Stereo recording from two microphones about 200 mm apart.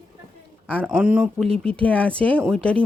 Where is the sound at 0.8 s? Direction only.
5° right (ahead or behind).